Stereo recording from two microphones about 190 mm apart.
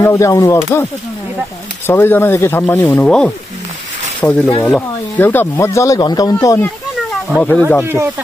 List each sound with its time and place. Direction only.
0.0 s speech: 15° left (ahead or behind)
1.9 s speech: 10° left (ahead or behind)
7.8 s speech: 15° right (ahead or behind)